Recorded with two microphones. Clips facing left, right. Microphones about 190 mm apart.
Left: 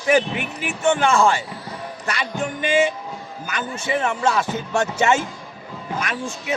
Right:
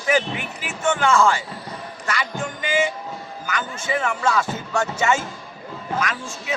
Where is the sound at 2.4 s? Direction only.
25° left (ahead or behind).